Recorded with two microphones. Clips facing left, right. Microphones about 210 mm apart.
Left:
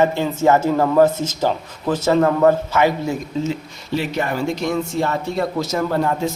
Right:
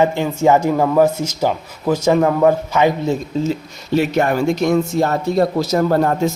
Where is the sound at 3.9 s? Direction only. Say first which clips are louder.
Right 6 dB; 50° right (ahead or behind).